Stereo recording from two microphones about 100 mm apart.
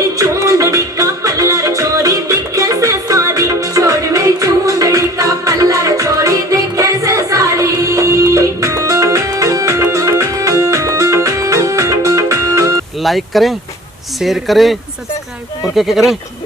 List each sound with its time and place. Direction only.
0.2 s music: 30° right (ahead or behind)
13.0 s speech: centre (ahead or behind)